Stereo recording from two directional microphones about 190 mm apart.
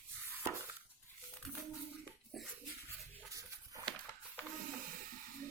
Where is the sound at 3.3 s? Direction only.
15° right (ahead or behind).